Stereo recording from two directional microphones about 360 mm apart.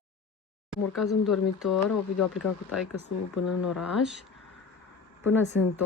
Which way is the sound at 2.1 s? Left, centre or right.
Left.